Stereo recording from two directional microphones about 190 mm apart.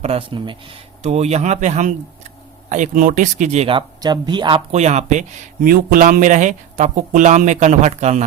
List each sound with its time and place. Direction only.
0.0 s speech: 30° right (ahead or behind)